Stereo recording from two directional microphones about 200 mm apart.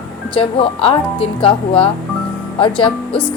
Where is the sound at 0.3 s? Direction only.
30° left (ahead or behind).